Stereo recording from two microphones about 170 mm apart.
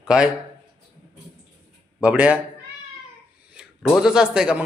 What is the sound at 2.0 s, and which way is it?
Speech, 10° right (ahead or behind).